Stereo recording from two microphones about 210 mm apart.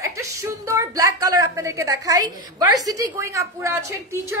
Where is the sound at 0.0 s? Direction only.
15° right (ahead or behind).